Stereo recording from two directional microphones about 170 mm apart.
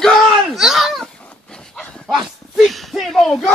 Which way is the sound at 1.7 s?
Centre (ahead or behind).